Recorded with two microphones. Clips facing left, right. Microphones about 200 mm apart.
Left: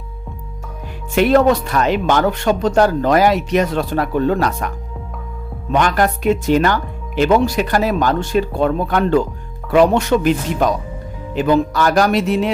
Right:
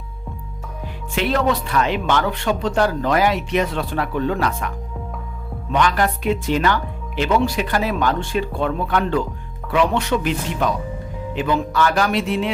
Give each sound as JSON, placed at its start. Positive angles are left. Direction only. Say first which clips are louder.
{"t": 1.1, "sound": "speech", "louder": "left 7 dB", "side_deg": 50}
{"t": 5.7, "sound": "speech", "louder": "left 3 dB", "side_deg": 45}